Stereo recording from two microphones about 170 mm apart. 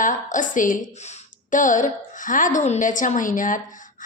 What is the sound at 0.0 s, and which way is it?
A woman's voice, 50° left (ahead or behind).